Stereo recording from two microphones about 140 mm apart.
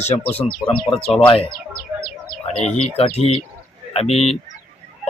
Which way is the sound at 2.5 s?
50° left (ahead or behind).